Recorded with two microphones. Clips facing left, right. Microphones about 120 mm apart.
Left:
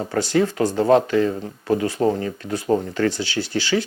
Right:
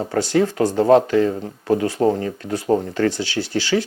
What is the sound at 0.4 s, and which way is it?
Speech, 40° right (ahead or behind).